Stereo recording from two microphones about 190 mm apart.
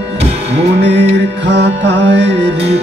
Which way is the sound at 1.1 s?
65° right (ahead or behind).